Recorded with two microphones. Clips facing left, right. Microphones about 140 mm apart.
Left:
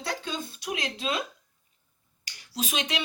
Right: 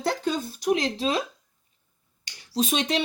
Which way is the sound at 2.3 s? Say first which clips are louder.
Right 8 dB; 30° right (ahead or behind).